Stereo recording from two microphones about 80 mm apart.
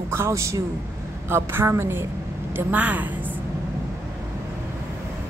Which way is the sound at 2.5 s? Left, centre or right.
Right.